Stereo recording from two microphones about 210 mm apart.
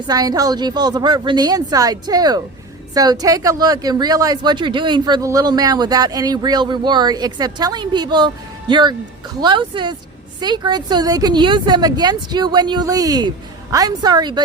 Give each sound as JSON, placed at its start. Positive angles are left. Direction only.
{"t": 0.1, "sound": "speech", "side_deg": -20}